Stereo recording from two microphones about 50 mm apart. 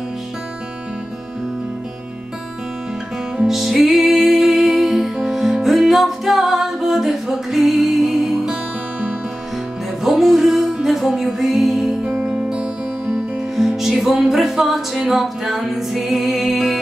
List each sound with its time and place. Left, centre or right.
3.4 s music: centre
10.0 s music: centre
12.0 s music: centre
13.0 s music: centre